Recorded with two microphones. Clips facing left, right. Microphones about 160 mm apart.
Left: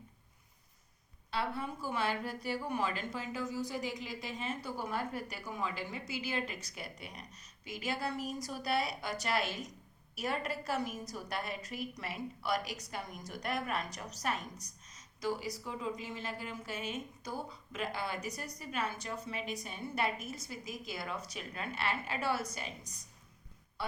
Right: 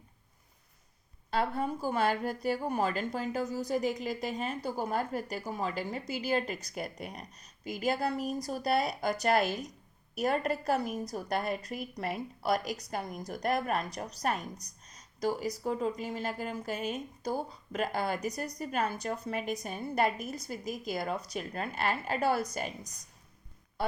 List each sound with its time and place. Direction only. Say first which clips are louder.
1.3 s a woman's voice: right 6 dB; 45° right (ahead or behind)